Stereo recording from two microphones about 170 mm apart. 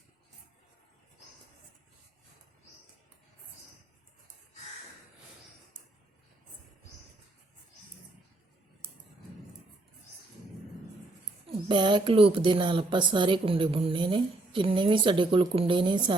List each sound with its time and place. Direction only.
11.5 s speech: 30° right (ahead or behind)